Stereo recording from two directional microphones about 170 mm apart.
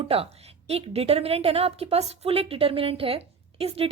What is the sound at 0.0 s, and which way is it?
A woman's voice, 35° right (ahead or behind).